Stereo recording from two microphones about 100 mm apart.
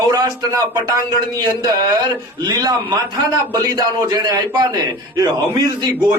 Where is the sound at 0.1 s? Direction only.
35° right (ahead or behind).